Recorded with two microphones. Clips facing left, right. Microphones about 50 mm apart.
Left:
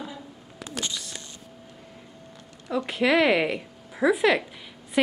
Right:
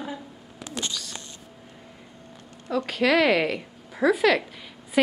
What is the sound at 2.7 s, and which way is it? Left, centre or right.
Speech, centre.